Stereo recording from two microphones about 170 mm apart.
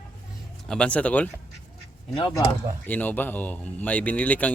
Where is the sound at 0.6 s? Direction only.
5° left (ahead or behind).